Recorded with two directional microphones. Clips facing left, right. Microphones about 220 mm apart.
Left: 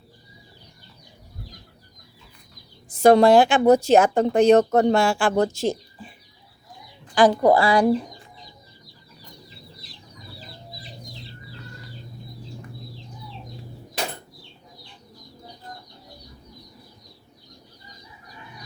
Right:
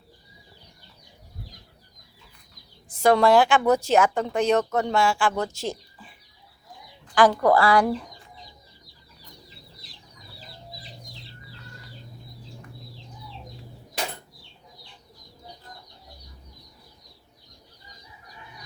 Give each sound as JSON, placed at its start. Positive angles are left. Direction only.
{"t": 3.0, "sound": "speech", "side_deg": 25}
{"t": 5.5, "sound": "speech", "side_deg": 25}
{"t": 7.1, "sound": "speech", "side_deg": 15}